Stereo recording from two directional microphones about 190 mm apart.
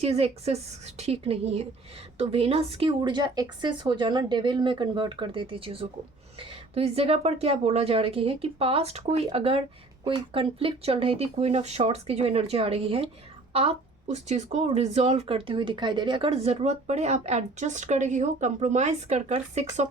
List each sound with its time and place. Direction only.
0.0 s a woman's voice: 35° right (ahead or behind)